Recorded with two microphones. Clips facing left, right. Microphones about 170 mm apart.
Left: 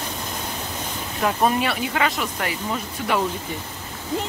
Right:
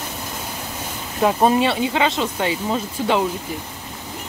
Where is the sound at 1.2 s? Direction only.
25° right (ahead or behind).